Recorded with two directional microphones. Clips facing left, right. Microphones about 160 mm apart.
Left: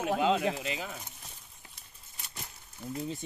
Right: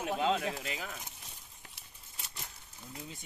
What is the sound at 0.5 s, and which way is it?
Speech, 25° left (ahead or behind).